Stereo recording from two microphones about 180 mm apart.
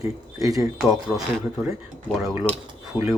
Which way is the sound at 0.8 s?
Centre (ahead or behind).